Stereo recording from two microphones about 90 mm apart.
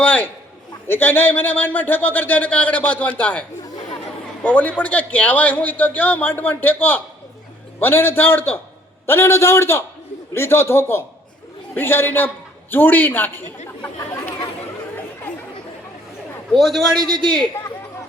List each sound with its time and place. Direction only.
0.0 s a sound: 15° left (ahead or behind)
0.9 s speech: 20° left (ahead or behind)
4.4 s a man's voice: 15° left (ahead or behind)
14.0 s speech: 30° left (ahead or behind)
16.5 s a man's voice: centre (ahead or behind)